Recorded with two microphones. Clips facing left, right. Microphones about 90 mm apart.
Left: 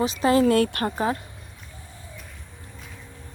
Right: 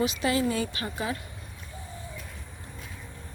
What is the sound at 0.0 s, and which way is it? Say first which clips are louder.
Speech: left 6 dB; 35° left (ahead or behind).